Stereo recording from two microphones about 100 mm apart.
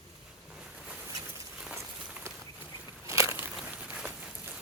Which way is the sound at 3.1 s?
30° right (ahead or behind).